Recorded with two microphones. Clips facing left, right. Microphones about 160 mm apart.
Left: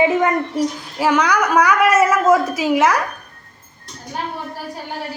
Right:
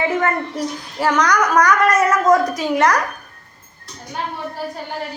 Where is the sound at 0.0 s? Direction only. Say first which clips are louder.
Left 3 dB; 15° left (ahead or behind).